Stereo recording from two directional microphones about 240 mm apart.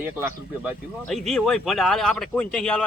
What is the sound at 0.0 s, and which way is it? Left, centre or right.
Speech, centre.